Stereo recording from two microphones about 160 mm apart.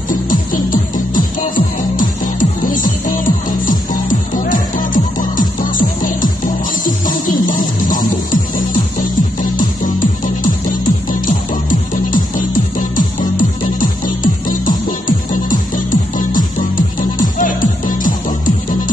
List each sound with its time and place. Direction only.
0.1 s music: 55° left (ahead or behind)
11.9 s music: 55° left (ahead or behind)